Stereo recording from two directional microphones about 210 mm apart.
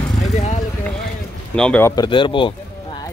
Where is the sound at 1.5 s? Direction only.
5° left (ahead or behind).